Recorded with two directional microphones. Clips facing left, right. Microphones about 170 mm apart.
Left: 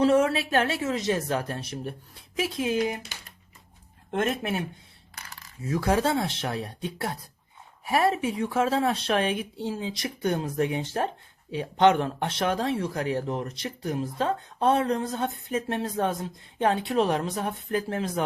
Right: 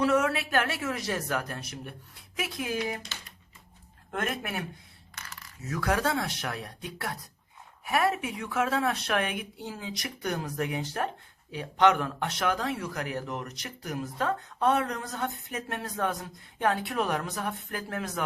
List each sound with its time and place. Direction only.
0.0 s speech: 30° left (ahead or behind)
3.1 s typing: 15° left (ahead or behind)
4.1 s speech: 25° left (ahead or behind)